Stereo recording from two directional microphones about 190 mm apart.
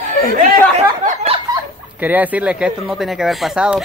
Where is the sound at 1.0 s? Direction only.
40° right (ahead or behind).